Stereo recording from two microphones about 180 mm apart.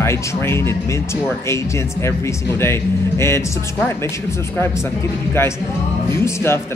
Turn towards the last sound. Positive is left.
turn(degrees=15)  # may be behind; listen again after turning